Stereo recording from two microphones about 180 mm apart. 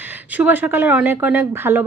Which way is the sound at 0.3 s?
10° right (ahead or behind).